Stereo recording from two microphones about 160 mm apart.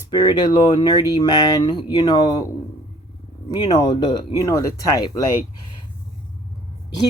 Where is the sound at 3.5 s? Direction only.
25° left (ahead or behind).